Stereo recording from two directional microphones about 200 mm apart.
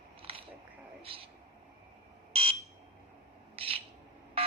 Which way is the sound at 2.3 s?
30° right (ahead or behind).